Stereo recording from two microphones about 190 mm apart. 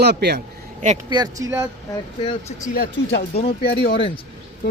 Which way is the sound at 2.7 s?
55° left (ahead or behind).